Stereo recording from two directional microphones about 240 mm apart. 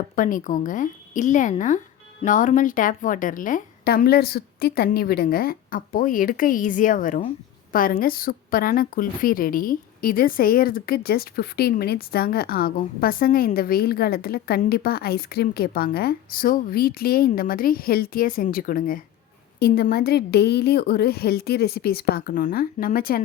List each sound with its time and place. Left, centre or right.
0.2 s a woman's voice: left